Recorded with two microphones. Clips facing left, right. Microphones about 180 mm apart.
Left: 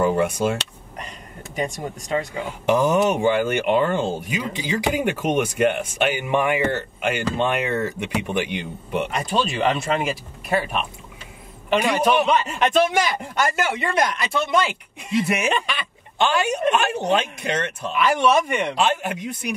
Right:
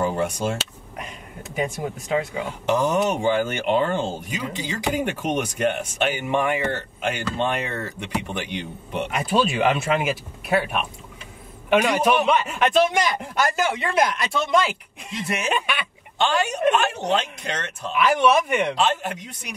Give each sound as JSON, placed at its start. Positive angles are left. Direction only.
{"t": 0.6, "sound": "a sound", "side_deg": -5}
{"t": 2.6, "sound": "speech", "side_deg": 10}
{"t": 9.1, "sound": "speech", "side_deg": -5}
{"t": 11.9, "sound": "speech", "side_deg": -5}
{"t": 15.2, "sound": "speech", "side_deg": 10}
{"t": 15.5, "sound": "speech", "side_deg": -10}
{"t": 16.2, "sound": "speech", "side_deg": 10}
{"t": 17.9, "sound": "speech", "side_deg": -5}
{"t": 18.8, "sound": "speech", "side_deg": 10}